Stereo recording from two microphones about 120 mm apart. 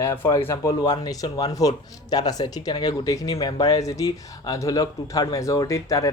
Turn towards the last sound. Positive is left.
turn(degrees=30)  # may be behind; listen again after turning